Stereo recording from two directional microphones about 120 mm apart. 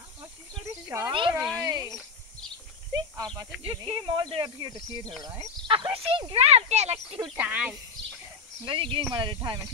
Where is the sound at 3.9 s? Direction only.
40° right (ahead or behind); by 7.1 s 65° right (ahead or behind).